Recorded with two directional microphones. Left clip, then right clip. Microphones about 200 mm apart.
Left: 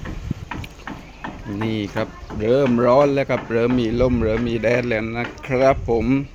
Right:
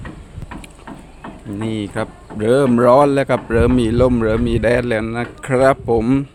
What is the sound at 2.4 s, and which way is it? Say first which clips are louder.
Speech: right 4 dB; 25° right (ahead or behind).